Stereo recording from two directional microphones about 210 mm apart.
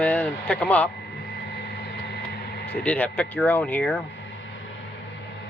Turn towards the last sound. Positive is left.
turn(degrees=5)  # may be behind; listen again after turning